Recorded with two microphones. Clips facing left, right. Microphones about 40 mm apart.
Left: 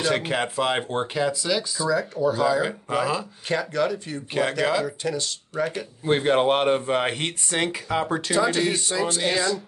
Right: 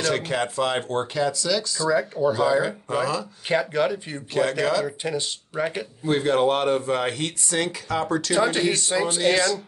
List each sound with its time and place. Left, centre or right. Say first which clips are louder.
0.0 s speech: even; centre
1.9 s speech: right 2 dB; right
2.6 s speech: even; centre
3.4 s speech: right 2 dB; centre
4.3 s speech: right 2 dB; centre
4.8 s speech: even; centre
6.0 s speech: left 1 dB; left
8.4 s speech: even; centre
9.2 s speech: right 5 dB; centre